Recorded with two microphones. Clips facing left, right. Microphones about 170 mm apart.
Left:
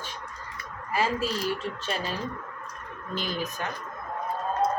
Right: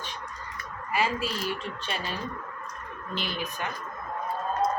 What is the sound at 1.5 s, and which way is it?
Speech, 40° left (ahead or behind).